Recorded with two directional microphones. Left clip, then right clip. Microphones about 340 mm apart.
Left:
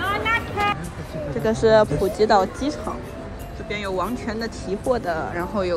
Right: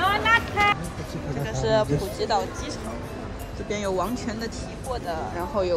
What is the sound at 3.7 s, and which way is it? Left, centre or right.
Speech, centre.